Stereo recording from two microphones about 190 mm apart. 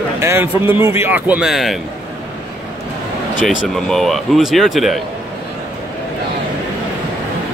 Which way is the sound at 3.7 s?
Centre (ahead or behind).